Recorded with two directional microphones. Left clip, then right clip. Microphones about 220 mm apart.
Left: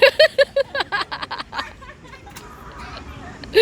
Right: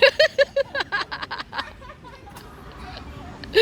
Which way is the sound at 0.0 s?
15° left (ahead or behind).